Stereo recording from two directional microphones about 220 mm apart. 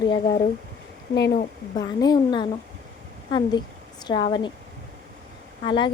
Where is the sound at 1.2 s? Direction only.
50° left (ahead or behind).